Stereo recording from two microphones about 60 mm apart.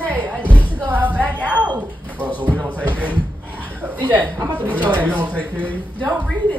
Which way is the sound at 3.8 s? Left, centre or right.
Right.